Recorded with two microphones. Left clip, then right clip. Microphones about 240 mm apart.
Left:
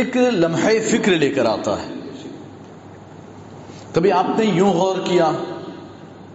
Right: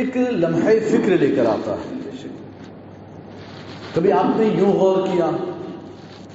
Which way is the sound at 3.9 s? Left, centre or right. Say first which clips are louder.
Left 1 dB; left.